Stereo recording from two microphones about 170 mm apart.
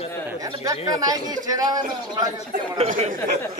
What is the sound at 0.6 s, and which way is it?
A man's voice, 20° right (ahead or behind).